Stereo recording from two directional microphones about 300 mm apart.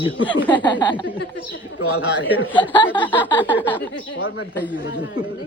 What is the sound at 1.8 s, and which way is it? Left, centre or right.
Speech, left.